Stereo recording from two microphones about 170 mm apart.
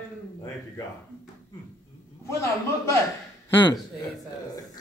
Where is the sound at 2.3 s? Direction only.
15° left (ahead or behind).